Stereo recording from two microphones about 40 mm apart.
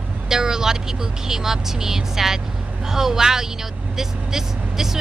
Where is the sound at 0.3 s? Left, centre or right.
Centre.